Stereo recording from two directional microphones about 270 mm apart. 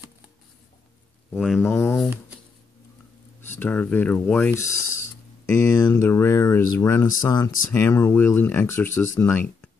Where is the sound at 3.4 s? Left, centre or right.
Centre.